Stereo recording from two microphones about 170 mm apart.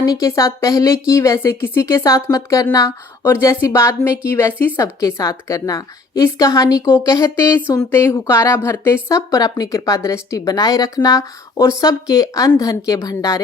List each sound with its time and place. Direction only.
0.0 s a woman's voice: 20° left (ahead or behind)